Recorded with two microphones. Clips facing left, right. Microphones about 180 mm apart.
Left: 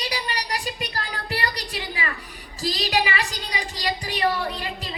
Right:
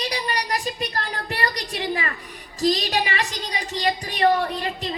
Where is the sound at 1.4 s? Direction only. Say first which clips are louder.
Right 4 dB; 40° right (ahead or behind).